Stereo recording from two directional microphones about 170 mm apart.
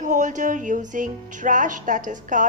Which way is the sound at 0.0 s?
50° right (ahead or behind).